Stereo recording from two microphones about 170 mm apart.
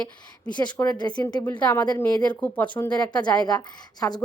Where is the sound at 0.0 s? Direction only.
5° left (ahead or behind).